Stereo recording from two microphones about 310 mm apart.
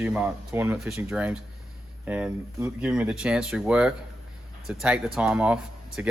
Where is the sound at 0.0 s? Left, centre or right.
Centre.